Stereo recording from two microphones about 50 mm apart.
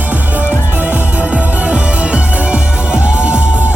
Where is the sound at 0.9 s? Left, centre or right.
Right.